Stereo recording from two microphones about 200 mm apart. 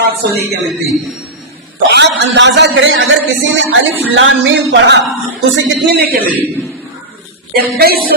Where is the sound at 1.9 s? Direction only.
60° right (ahead or behind).